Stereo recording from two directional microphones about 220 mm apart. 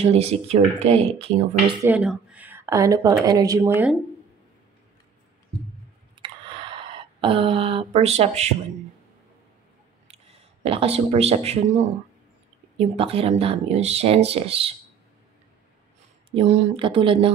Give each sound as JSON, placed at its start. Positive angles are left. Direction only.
{"t": 0.0, "sound": "speech", "side_deg": -30}
{"t": 1.8, "sound": "speech", "side_deg": -5}
{"t": 6.2, "sound": "a sound", "side_deg": -20}
{"t": 10.0, "sound": "a sound", "side_deg": -25}
{"t": 12.7, "sound": "speech", "side_deg": -25}
{"t": 16.3, "sound": "speech", "side_deg": -25}